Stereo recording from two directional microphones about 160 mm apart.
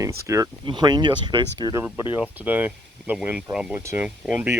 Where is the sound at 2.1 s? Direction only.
10° right (ahead or behind).